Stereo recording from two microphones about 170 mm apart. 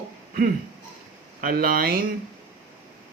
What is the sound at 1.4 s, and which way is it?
Speech, 55° right (ahead or behind).